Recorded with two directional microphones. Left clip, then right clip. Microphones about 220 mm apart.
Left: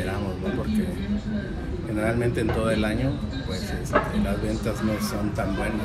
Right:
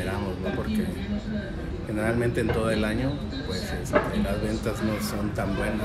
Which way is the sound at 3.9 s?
35° left (ahead or behind).